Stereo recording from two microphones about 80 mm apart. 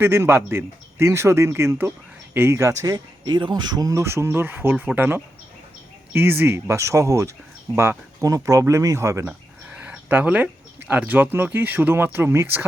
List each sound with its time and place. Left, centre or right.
0.0 s a man's voice: right
2.8 s speech: right
4.0 s a man's voice: right
9.7 s speech: centre